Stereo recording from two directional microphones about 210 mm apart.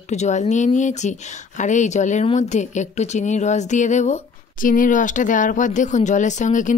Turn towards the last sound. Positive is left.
turn(degrees=35)  # may be behind; listen again after turning